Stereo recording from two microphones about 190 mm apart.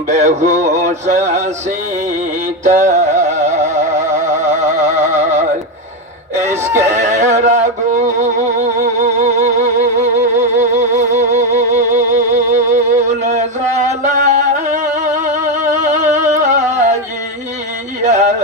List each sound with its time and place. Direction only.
0.1 s a sound: 35° right (ahead or behind)
2.6 s music: 40° right (ahead or behind)
6.7 s neigh: 40° right (ahead or behind)
8.8 s music: 40° right (ahead or behind)
10.5 s music: 40° right (ahead or behind)
18.0 s a sound: 35° right (ahead or behind)